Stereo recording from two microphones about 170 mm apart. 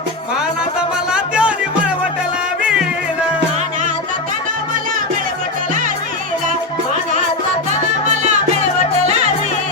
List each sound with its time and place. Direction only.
0.3 s music: 5° right (ahead or behind)
9.0 s music: 40° right (ahead or behind)